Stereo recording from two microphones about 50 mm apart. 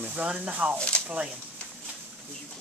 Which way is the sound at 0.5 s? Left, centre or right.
Right.